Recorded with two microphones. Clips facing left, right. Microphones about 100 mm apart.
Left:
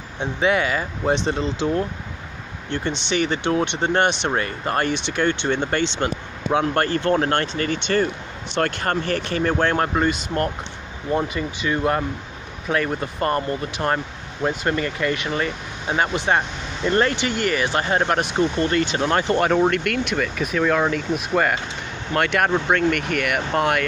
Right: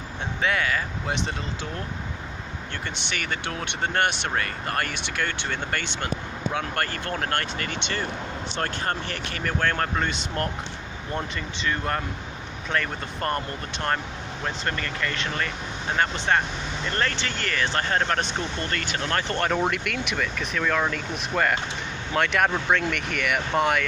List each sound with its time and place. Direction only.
0.4 s speech: 20° left (ahead or behind)
1.0 s speech: 35° left (ahead or behind)
2.7 s speech: 25° left (ahead or behind); by 8.1 s 45° left (ahead or behind)
8.5 s speech: 70° left (ahead or behind)
9.3 s speech: 30° left (ahead or behind)
10.0 s speech: 5° left (ahead or behind)